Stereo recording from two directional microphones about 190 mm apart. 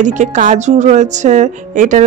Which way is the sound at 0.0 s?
40° right (ahead or behind).